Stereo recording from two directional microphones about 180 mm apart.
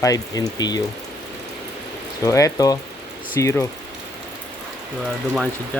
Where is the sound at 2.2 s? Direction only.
20° left (ahead or behind).